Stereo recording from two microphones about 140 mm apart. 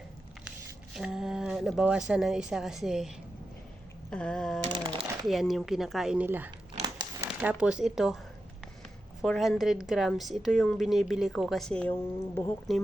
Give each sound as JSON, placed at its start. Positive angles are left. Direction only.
{"t": 0.9, "sound": "speech", "side_deg": -5}
{"t": 4.1, "sound": "a woman's voice", "side_deg": 5}
{"t": 4.7, "sound": "a sound", "side_deg": -30}
{"t": 5.2, "sound": "a woman's voice", "side_deg": 0}
{"t": 6.2, "sound": "speech", "side_deg": -15}
{"t": 6.8, "sound": "crumpling", "side_deg": -30}
{"t": 7.3, "sound": "a woman's voice", "side_deg": -5}
{"t": 9.2, "sound": "a woman's voice", "side_deg": 0}
{"t": 12.7, "sound": "a woman's voice", "side_deg": 0}